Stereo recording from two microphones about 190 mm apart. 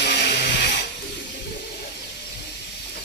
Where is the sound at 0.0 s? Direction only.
60° left (ahead or behind).